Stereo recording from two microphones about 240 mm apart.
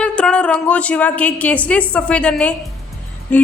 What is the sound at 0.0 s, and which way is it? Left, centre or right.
A woman's voice, centre.